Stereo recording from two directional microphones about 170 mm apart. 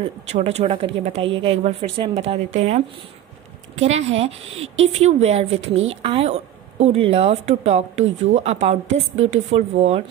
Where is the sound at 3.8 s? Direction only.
40° right (ahead or behind).